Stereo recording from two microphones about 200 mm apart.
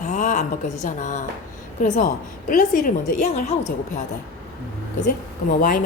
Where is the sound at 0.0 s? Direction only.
40° left (ahead or behind).